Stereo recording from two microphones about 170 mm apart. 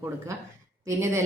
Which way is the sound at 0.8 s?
15° right (ahead or behind).